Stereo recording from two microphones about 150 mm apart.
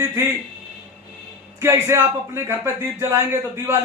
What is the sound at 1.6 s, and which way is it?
A man's voice, 15° right (ahead or behind).